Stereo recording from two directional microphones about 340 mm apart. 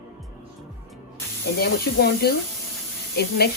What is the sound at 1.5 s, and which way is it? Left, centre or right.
Speech, left.